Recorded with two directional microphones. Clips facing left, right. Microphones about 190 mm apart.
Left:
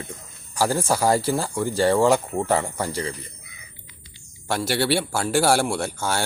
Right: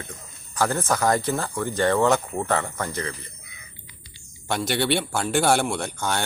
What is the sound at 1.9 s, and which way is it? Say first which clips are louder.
Speech: left 2 dB; 10° left (ahead or behind).